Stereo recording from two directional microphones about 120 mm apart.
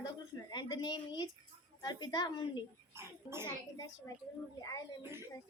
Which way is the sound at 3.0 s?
20° right (ahead or behind).